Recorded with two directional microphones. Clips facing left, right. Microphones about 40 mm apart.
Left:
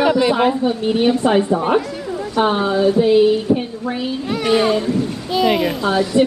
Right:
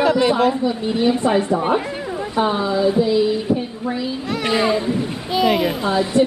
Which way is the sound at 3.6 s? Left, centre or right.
Left.